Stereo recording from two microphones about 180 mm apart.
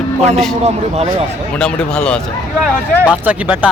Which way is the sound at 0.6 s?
35° right (ahead or behind).